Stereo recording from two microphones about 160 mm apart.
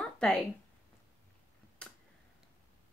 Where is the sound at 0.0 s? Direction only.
5° left (ahead or behind).